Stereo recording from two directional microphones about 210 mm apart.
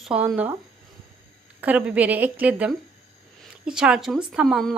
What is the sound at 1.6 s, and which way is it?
A woman's voice, 5° right (ahead or behind).